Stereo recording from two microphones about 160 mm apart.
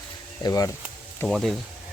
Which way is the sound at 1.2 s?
Centre (ahead or behind).